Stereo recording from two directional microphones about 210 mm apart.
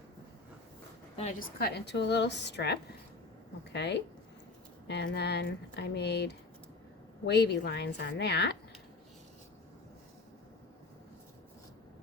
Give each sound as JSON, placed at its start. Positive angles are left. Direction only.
{"t": 1.1, "sound": "a woman's voice", "side_deg": 35}
{"t": 1.5, "sound": "speech", "side_deg": 50}